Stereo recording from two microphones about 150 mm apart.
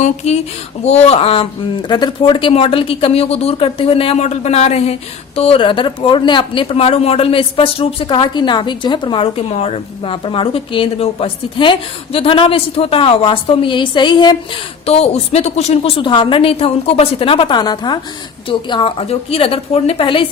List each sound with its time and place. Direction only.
0.9 s speech: 45° left (ahead or behind); by 14.3 s 30° left (ahead or behind)
14.8 s speech: 45° left (ahead or behind)